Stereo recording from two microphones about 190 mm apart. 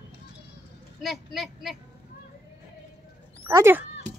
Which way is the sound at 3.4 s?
15° right (ahead or behind).